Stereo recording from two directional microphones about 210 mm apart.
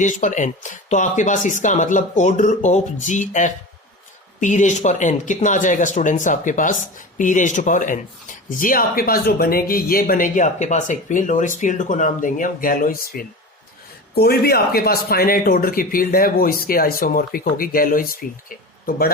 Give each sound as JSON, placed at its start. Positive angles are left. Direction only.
{"t": 0.0, "sound": "speech", "side_deg": 35}